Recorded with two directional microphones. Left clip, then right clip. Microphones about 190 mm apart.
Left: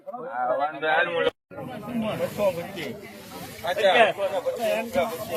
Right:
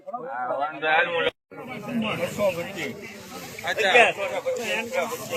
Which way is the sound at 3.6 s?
60° left (ahead or behind).